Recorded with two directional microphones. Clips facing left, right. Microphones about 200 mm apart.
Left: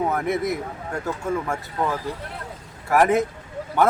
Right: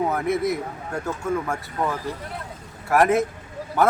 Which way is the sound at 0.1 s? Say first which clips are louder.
Right 1 dB; centre (ahead or behind).